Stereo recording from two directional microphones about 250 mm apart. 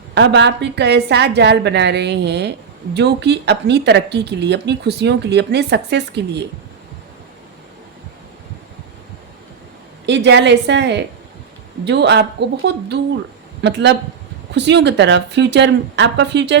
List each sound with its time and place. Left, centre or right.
0.1 s speech: right
10.1 s speech: right